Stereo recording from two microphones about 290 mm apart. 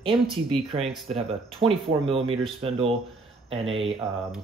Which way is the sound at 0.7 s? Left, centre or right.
Centre.